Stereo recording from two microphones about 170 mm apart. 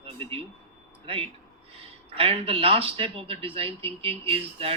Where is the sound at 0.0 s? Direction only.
35° right (ahead or behind).